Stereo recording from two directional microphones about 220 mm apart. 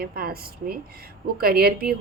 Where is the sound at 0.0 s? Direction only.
45° right (ahead or behind).